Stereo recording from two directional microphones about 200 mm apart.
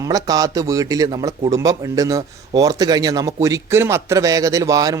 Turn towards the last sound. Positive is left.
turn(degrees=-15)  # may be behind; listen again after turning